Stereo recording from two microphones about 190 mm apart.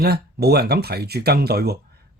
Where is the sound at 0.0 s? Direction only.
55° right (ahead or behind).